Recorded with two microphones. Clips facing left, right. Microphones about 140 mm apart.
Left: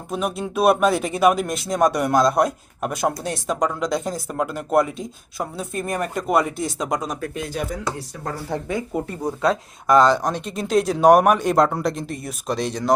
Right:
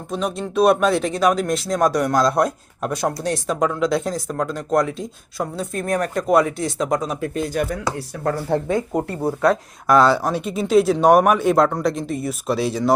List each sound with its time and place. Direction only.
0.1 s speech: 5° left (ahead or behind)
7.5 s speech: 60° right (ahead or behind)
9.5 s speech: centre (ahead or behind)